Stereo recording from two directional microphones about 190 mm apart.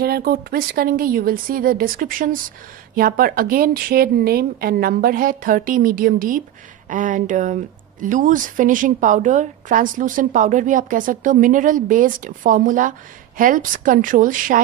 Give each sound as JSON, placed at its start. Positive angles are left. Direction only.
{"t": 0.0, "sound": "speech", "side_deg": -55}